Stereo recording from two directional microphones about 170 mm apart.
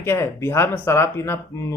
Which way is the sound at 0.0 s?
15° left (ahead or behind).